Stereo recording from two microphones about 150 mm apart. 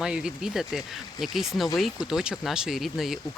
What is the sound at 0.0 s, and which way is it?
Speech, 5° right (ahead or behind).